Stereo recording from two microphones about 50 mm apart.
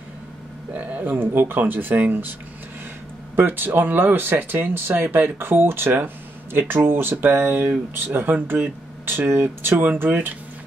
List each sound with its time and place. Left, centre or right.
0.7 s speech: right
1.2 s speech: right
3.3 s speech: right